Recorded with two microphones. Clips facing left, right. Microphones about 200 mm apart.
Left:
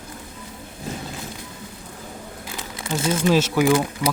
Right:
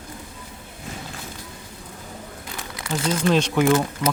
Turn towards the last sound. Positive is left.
turn(degrees=5)  # may be behind; listen again after turning